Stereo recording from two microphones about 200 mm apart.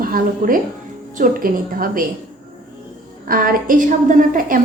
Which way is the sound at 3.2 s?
45° right (ahead or behind).